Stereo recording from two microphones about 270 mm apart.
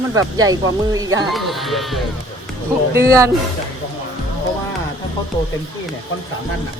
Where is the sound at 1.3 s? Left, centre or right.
Centre.